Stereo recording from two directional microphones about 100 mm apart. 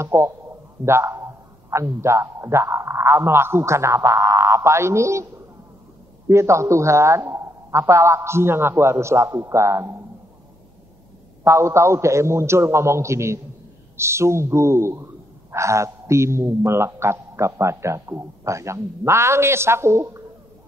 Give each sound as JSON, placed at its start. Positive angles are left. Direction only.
{"t": 0.0, "sound": "a man's voice", "side_deg": -30}
{"t": 11.4, "sound": "speech", "side_deg": -30}